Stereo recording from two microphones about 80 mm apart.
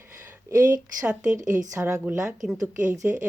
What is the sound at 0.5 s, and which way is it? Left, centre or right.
Speech, right.